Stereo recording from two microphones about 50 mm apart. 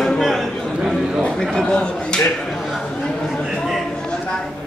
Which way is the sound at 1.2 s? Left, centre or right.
Centre.